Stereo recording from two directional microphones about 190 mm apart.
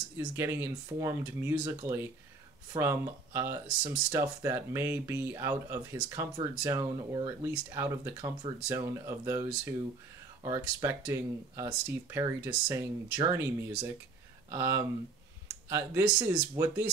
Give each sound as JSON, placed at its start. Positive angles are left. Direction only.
{"t": 0.4, "sound": "speech", "side_deg": -15}
{"t": 10.6, "sound": "speech", "side_deg": -15}